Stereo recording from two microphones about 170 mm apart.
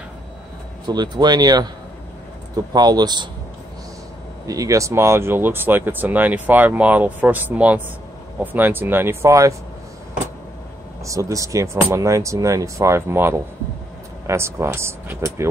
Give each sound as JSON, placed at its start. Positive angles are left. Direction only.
{"t": 0.8, "sound": "speech", "side_deg": -25}
{"t": 4.5, "sound": "speech", "side_deg": -20}
{"t": 11.1, "sound": "speech", "side_deg": -20}